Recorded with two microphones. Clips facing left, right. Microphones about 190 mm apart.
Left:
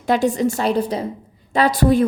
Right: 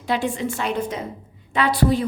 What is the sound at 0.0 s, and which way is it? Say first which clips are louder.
A woman's voice: left 6 dB; 45° left (ahead or behind).